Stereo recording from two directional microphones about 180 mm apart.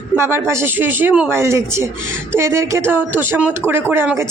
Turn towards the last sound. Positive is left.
turn(degrees=-10)  # may be behind; listen again after turning